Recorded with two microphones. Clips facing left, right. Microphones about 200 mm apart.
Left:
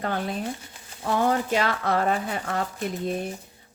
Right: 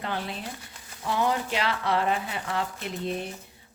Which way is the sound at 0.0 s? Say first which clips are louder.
Left 5 dB; 45° left (ahead or behind).